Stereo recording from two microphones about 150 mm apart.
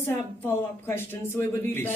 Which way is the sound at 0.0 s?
15° left (ahead or behind).